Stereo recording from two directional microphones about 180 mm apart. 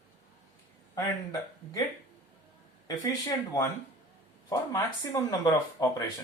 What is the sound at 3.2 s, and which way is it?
Speech, 20° left (ahead or behind).